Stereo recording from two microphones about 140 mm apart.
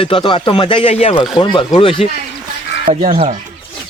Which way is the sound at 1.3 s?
35° left (ahead or behind).